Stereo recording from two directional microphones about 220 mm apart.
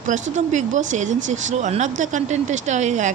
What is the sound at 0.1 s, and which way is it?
Speech, 35° right (ahead or behind).